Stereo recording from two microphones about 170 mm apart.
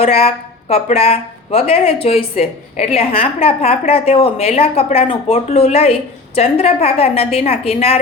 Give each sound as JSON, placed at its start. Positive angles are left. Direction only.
{"t": 0.0, "sound": "a woman's voice", "side_deg": 35}